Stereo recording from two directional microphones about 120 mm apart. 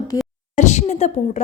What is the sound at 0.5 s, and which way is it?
Speech, 80° left.